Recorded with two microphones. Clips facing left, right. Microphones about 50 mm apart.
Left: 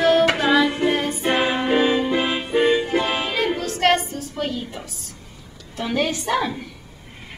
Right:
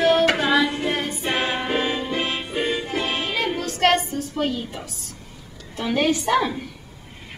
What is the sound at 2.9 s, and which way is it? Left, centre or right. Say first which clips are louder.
Music: left 4 dB; centre.